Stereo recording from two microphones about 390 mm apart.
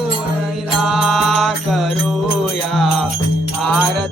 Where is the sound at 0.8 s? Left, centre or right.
Centre.